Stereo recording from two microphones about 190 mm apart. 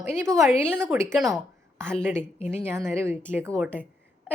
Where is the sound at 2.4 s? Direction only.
10° right (ahead or behind).